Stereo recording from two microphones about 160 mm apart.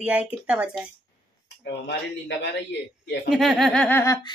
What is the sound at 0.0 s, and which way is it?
Speech, 10° right (ahead or behind).